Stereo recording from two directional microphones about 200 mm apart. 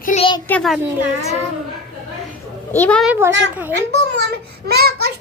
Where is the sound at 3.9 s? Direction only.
55° right (ahead or behind).